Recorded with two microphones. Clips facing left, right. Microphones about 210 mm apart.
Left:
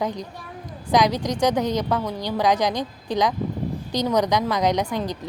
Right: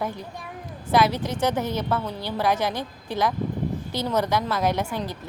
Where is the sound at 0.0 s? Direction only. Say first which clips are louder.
Left 3 dB; 15° left (ahead or behind).